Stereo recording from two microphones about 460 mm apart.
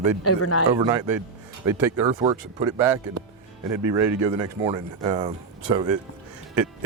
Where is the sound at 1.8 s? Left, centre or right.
Right.